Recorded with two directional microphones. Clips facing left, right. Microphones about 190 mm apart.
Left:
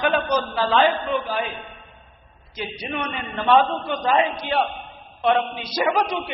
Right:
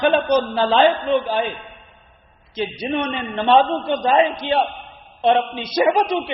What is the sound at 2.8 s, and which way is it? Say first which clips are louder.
A man's voice: right 5 dB; 30° right (ahead or behind).